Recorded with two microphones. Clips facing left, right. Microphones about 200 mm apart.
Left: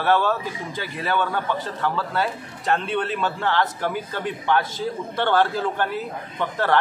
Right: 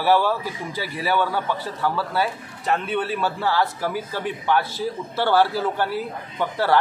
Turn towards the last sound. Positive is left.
turn(degrees=-10)  # may be behind; listen again after turning